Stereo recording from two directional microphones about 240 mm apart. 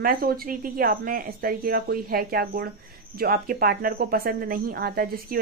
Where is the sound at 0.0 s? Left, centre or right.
Right.